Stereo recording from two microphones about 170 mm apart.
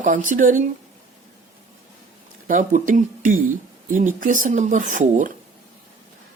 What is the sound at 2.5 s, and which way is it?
Speech, 50° right (ahead or behind).